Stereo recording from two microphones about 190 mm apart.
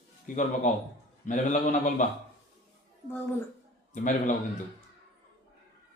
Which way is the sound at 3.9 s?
40° left (ahead or behind).